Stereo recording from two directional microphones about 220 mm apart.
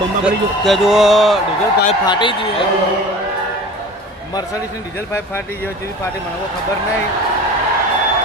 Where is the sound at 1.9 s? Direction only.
20° left (ahead or behind).